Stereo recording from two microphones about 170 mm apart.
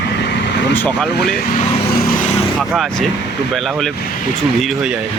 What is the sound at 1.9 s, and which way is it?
Vehicle, 55° left (ahead or behind).